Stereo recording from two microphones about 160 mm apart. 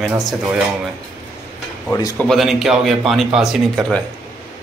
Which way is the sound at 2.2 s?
Centre (ahead or behind).